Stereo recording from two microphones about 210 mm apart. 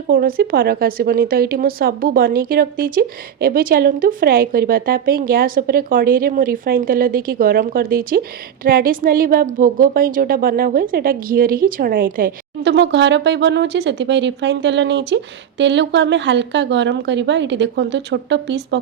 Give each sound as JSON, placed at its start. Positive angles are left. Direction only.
{"t": 0.1, "sound": "a woman's voice", "side_deg": -45}